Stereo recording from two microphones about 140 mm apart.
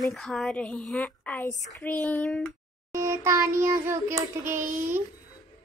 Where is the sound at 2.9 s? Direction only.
20° right (ahead or behind).